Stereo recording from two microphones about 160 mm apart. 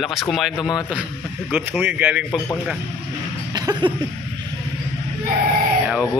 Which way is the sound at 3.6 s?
25° right (ahead or behind).